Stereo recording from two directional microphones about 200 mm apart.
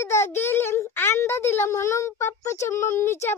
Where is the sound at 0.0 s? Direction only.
15° left (ahead or behind).